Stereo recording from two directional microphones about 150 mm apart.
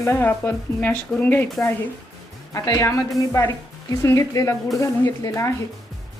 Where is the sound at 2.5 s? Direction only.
20° left (ahead or behind).